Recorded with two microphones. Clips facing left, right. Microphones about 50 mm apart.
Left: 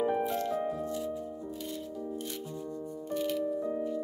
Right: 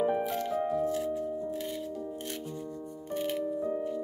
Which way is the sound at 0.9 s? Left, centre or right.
Right.